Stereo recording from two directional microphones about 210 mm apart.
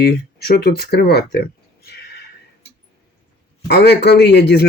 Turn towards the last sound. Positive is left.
turn(degrees=50)  # may be behind; listen again after turning